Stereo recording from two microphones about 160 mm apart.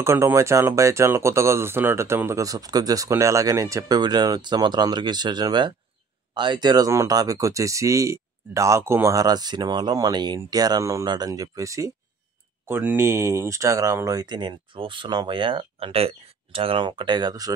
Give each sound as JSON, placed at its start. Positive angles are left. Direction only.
{"t": 0.0, "sound": "speech", "side_deg": -15}